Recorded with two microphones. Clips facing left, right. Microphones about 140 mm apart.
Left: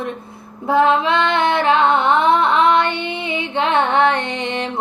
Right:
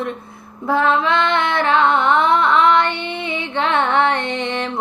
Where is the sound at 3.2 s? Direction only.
20° left (ahead or behind).